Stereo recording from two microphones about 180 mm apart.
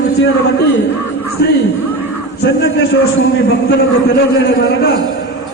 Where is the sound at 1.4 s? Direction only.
70° left (ahead or behind).